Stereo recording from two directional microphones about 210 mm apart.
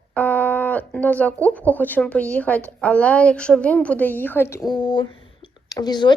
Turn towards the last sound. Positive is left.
turn(degrees=20)  # may be behind; listen again after turning